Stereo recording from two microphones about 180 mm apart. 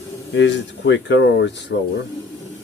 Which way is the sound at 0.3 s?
85° left.